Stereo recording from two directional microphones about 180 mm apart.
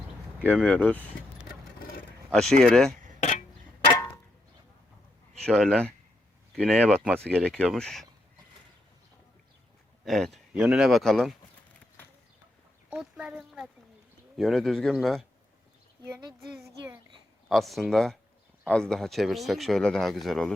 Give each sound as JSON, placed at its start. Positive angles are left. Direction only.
{"t": 0.7, "sound": "speech", "side_deg": 10}
{"t": 2.3, "sound": "speech", "side_deg": 5}
{"t": 3.2, "sound": "a sound", "side_deg": 40}
{"t": 5.4, "sound": "speech", "side_deg": 5}
{"t": 6.8, "sound": "speech", "side_deg": -5}
{"t": 7.2, "sound": "speech", "side_deg": 5}
{"t": 10.1, "sound": "speech", "side_deg": 0}
{"t": 12.9, "sound": "speech", "side_deg": -5}
{"t": 16.4, "sound": "speech", "side_deg": 0}
{"t": 16.6, "sound": "a child's voice", "side_deg": -15}
{"t": 17.5, "sound": "speech", "side_deg": 0}